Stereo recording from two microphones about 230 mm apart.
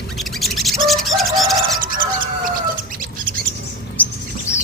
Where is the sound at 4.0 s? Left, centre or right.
Centre.